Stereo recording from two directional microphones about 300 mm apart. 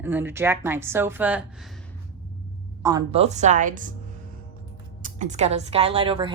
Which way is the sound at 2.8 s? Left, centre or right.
Centre.